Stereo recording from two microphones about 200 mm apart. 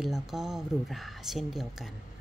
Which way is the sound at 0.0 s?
Centre (ahead or behind).